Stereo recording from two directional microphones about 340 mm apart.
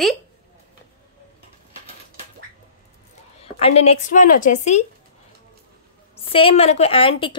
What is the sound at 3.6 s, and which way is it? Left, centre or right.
A woman's voice, centre.